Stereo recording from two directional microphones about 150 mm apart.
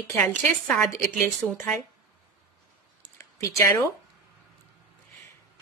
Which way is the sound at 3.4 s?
20° left (ahead or behind).